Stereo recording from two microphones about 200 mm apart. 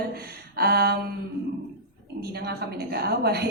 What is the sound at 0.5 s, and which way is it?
Speech, 50° right (ahead or behind).